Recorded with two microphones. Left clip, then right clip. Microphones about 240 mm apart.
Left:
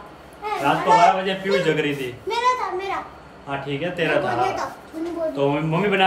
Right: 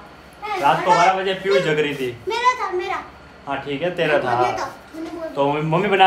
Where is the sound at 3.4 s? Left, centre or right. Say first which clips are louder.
Right 3 dB; centre.